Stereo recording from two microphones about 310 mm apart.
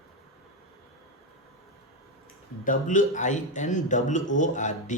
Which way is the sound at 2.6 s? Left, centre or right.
Left.